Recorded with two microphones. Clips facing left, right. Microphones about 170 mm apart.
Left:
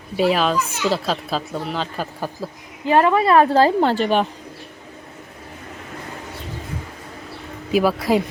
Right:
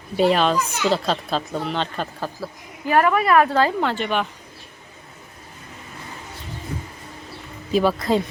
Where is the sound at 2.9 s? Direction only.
25° left (ahead or behind).